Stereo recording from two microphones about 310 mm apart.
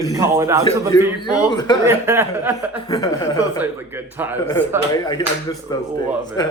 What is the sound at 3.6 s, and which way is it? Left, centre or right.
Speech, centre.